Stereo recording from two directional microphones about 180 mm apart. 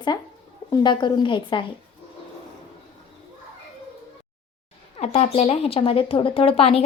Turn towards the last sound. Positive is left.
turn(degrees=35)  # may be behind; listen again after turning